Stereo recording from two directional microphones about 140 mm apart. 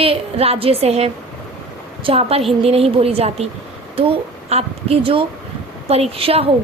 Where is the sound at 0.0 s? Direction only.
45° right (ahead or behind).